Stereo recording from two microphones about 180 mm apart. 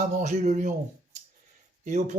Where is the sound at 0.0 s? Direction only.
40° right (ahead or behind).